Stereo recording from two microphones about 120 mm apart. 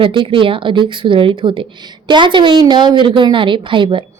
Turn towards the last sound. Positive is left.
turn(degrees=-45)  # may be behind; listen again after turning